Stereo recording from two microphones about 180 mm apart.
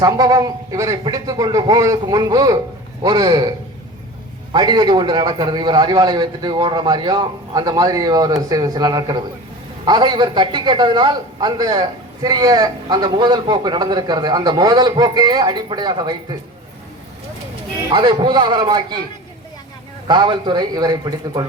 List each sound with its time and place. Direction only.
0.0 s a man's voice: 20° right (ahead or behind)
4.5 s a man's voice: 25° right (ahead or behind)
17.9 s a man's voice: 25° right (ahead or behind)
20.1 s a man's voice: 25° right (ahead or behind)